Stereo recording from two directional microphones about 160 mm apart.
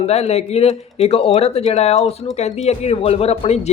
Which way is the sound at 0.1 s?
40° left (ahead or behind).